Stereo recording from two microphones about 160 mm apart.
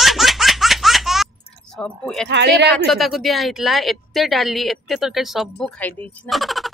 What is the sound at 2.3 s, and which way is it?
Speech, 90° right.